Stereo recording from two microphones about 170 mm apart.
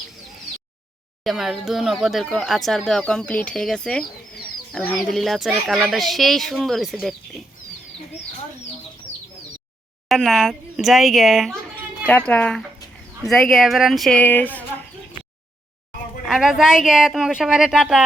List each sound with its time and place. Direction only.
1.2 s speech: centre (ahead or behind)
10.1 s speech: centre (ahead or behind)
16.2 s speech: centre (ahead or behind)